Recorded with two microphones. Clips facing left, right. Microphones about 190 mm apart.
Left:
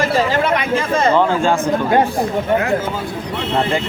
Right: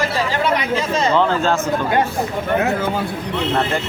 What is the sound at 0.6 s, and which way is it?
Speech, 55° left (ahead or behind).